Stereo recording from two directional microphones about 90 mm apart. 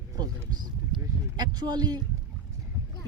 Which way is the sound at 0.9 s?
55° right (ahead or behind).